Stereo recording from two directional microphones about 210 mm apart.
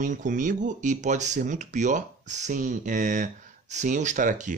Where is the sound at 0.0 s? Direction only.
40° right (ahead or behind).